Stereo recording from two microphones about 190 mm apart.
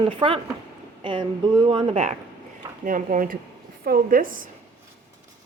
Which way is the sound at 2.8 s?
45° right (ahead or behind).